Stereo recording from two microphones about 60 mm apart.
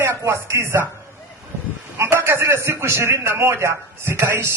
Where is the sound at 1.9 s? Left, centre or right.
Right.